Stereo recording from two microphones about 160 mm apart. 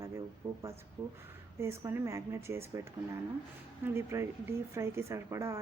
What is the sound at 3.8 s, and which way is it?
Speech, 15° right (ahead or behind).